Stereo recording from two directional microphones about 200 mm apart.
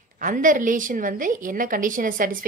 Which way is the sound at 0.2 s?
40° right (ahead or behind).